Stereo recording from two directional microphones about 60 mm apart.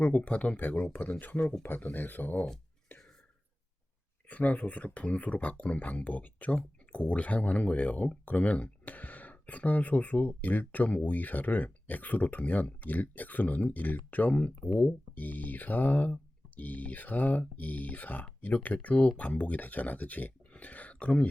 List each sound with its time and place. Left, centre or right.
0.0 s speech: left
2.9 s whispering: left
4.3 s speech: left